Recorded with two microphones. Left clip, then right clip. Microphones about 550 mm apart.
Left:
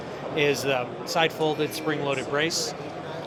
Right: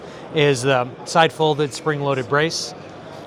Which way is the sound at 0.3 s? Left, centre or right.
Right.